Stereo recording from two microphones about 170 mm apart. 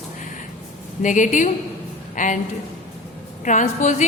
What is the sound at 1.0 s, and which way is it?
A woman's voice, 50° left (ahead or behind).